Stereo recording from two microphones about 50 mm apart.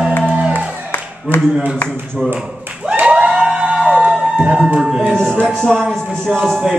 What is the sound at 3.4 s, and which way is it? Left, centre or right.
Emergency vehicle, right.